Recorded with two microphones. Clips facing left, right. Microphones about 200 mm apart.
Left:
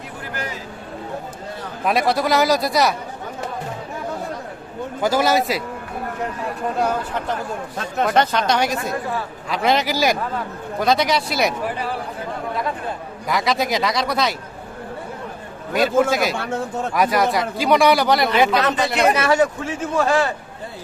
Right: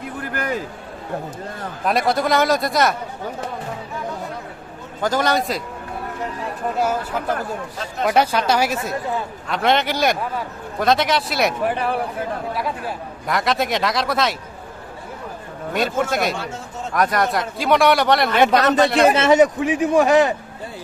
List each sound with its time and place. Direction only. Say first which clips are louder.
0.2 s a sound: right 6 dB; 55° right (ahead or behind)
1.8 s speech: even; centre (ahead or behind)
5.0 s speech: left 2 dB; 5° left (ahead or behind)
8.0 s a man's voice: right 1 dB; 10° right (ahead or behind)
13.2 s speech: even; centre (ahead or behind)
15.7 s speech: left 4 dB; centre (ahead or behind)
16.4 s speech: left 6 dB; 60° left (ahead or behind)
16.9 s speech: even; 5° left (ahead or behind)
19.1 s a man's voice: right 4 dB; 20° right (ahead or behind)